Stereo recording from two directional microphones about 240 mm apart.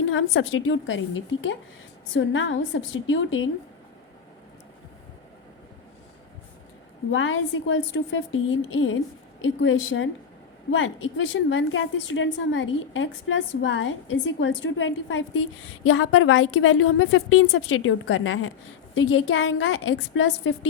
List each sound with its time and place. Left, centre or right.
0.1 s a woman's voice: left
7.1 s a woman's voice: left